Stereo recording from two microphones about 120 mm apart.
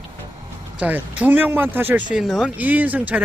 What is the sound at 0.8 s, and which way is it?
Speech, 15° right (ahead or behind).